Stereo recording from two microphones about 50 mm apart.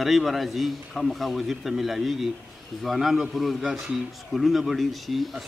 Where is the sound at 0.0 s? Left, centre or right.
Centre.